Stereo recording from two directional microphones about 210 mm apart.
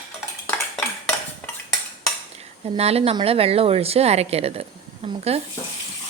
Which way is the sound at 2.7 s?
30° right (ahead or behind).